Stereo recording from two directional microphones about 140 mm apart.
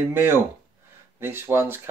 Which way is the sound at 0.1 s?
15° right (ahead or behind).